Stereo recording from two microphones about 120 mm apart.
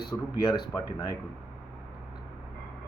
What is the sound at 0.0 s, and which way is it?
A man's voice, 35° left (ahead or behind).